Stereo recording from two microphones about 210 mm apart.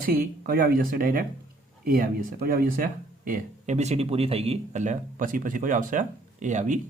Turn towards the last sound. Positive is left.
turn(degrees=-35)  # may be behind; listen again after turning